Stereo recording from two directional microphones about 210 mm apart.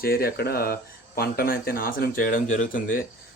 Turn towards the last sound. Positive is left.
turn(degrees=40)  # may be behind; listen again after turning